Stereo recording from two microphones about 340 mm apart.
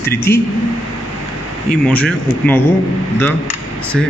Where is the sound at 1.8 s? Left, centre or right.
Centre.